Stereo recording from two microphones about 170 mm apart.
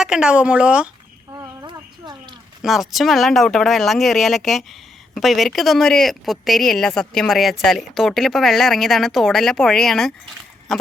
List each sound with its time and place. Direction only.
0.0 s speech: 5° right (ahead or behind)
1.3 s a sound: 25° right (ahead or behind)
2.6 s speech: centre (ahead or behind)